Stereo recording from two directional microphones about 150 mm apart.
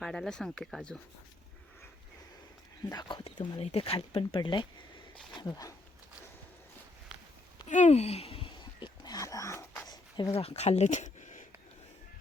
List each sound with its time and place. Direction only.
0.0 s speech: centre (ahead or behind)
2.9 s speech: 30° left (ahead or behind)
7.7 s whispering: 50° left (ahead or behind); by 10.3 s 25° left (ahead or behind)
10.3 s speech: 45° left (ahead or behind)